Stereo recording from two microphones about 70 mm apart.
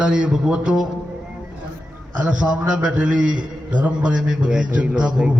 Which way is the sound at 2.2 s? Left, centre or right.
Centre.